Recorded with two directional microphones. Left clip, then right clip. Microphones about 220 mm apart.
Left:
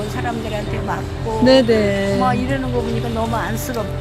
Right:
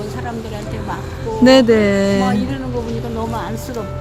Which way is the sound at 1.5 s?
35° right (ahead or behind).